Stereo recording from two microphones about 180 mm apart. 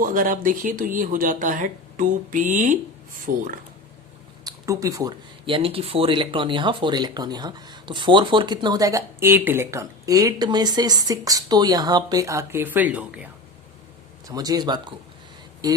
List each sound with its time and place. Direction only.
0.0 s speech: 50° right (ahead or behind)
4.4 s speech: 15° right (ahead or behind)
14.3 s speech: 20° right (ahead or behind)